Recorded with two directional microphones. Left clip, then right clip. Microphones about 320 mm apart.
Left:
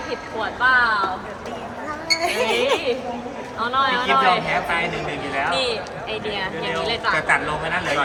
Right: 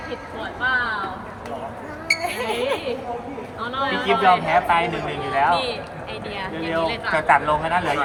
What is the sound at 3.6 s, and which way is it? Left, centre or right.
Speech, centre.